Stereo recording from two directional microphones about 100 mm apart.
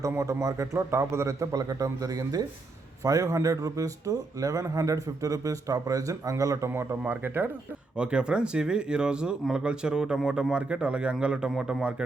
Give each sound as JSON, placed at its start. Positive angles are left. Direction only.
{"t": 0.0, "sound": "speech", "side_deg": -30}
{"t": 7.0, "sound": "speech", "side_deg": -20}
{"t": 7.9, "sound": "speech", "side_deg": -10}